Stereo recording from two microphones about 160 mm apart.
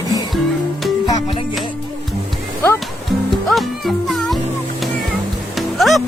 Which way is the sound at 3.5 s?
Centre (ahead or behind).